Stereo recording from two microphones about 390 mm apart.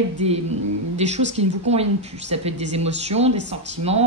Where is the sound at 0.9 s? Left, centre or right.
Centre.